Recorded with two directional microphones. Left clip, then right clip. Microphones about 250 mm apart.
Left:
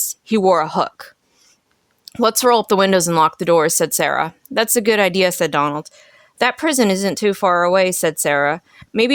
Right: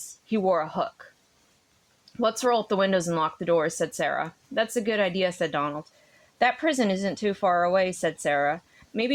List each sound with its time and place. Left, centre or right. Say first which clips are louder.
0.3 s speech: left 9 dB; left
2.1 s speech: left 9 dB; left